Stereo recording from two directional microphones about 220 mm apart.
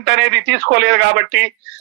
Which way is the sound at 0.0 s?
55° right (ahead or behind).